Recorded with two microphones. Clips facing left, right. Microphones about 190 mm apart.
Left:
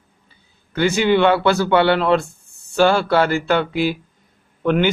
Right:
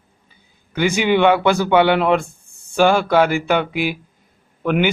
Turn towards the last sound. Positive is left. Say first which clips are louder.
# left 1 dB
turn(degrees=-10)  # may be behind; listen again after turning